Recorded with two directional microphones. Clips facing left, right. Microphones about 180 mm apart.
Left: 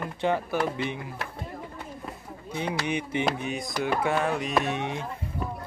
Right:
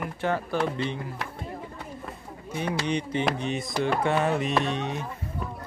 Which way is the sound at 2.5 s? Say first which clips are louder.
Right 1 dB; 15° left (ahead or behind).